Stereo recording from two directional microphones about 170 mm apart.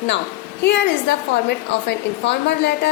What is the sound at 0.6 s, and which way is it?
A woman's voice, 90° left.